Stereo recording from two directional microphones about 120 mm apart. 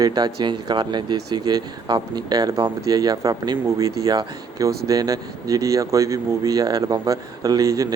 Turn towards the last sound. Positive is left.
turn(degrees=-30)  # may be behind; listen again after turning